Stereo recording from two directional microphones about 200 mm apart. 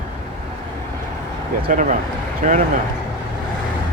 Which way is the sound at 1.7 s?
40° right (ahead or behind).